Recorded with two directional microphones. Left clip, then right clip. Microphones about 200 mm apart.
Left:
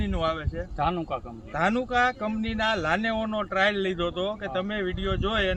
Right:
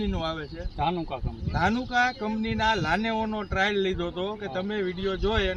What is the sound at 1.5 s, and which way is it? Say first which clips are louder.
A man's voice: left 1 dB; 20° left (ahead or behind).